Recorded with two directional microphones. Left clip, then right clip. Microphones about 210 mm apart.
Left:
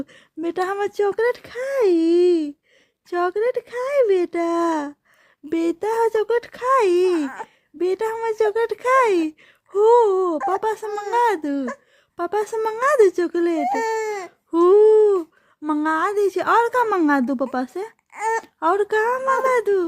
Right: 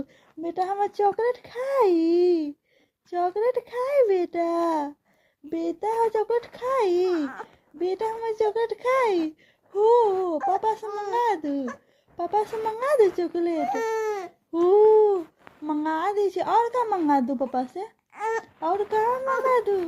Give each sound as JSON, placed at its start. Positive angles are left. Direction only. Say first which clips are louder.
{"t": 0.1, "sound": "a woman's voice", "louder": "left 6 dB", "side_deg": 50}
{"t": 13.8, "sound": "speech", "louder": "left 3 dB", "side_deg": 5}
{"t": 14.5, "sound": "a sound", "louder": "left 4 dB", "side_deg": 40}
{"t": 15.6, "sound": "a woman's voice", "louder": "left 5 dB", "side_deg": 45}
{"t": 18.2, "sound": "speech", "louder": "left 5 dB", "side_deg": 5}
{"t": 18.6, "sound": "speech", "louder": "left 5 dB", "side_deg": 45}